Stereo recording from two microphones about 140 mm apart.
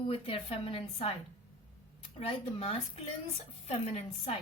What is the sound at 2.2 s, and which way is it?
Speech, 50° left (ahead or behind).